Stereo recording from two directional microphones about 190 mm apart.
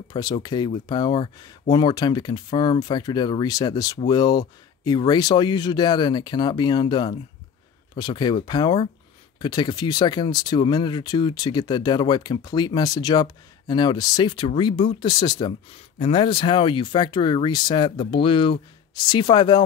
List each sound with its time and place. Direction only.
0.1 s speech: 20° left (ahead or behind)